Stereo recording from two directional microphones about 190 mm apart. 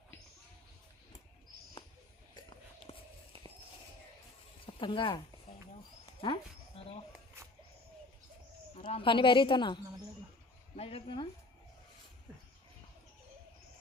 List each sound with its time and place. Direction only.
2.9 s whispering: 30° left (ahead or behind)
4.6 s speech: 25° left (ahead or behind)
6.2 s a sound: 25° left (ahead or behind)
8.8 s a woman's voice: 25° left (ahead or behind)